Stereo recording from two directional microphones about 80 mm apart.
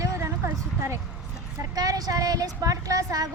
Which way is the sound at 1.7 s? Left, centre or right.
Right.